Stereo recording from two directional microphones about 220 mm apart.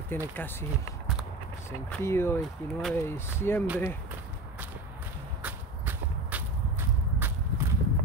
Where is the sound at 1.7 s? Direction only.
10° left (ahead or behind).